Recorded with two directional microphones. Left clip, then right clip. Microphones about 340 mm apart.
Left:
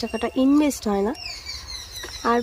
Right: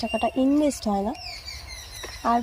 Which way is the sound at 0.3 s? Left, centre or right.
Left.